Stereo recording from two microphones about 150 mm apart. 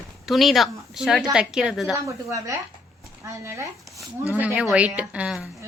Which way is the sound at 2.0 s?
20° right (ahead or behind).